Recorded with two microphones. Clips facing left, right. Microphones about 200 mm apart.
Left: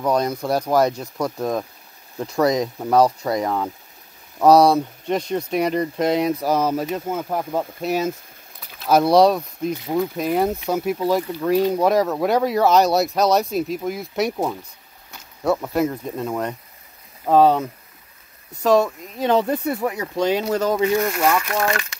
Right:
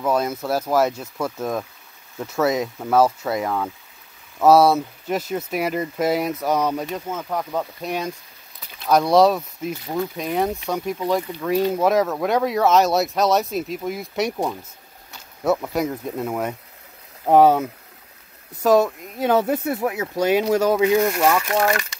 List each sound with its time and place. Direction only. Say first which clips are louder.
0.0 s speech: left 1 dB; 5° right (ahead or behind)
1.1 s speech: left 2 dB; 15° left (ahead or behind)
2.2 s speech: left 2 dB; 5° right (ahead or behind)
6.9 s speech: left 3 dB; 15° left (ahead or behind); by 21.7 s 15° right (ahead or behind)